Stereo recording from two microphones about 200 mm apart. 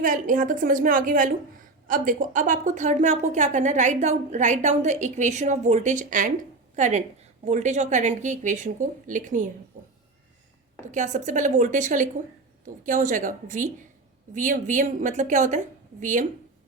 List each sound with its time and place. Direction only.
0.0 s a woman's voice: 40° right (ahead or behind)
10.9 s a woman's voice: 40° right (ahead or behind)